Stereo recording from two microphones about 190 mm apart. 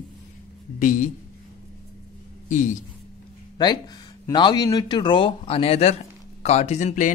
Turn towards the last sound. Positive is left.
turn(degrees=40)  # may be behind; listen again after turning